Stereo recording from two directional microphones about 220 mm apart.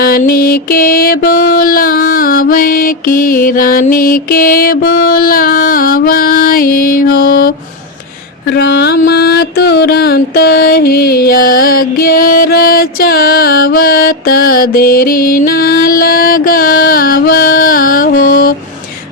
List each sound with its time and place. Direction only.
0.0 s music: 40° left (ahead or behind)